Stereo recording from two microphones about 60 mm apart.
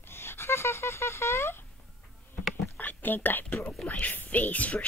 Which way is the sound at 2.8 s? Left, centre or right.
Left.